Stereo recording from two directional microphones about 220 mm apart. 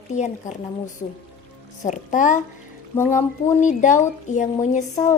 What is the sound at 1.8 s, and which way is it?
A woman's voice, 35° left (ahead or behind).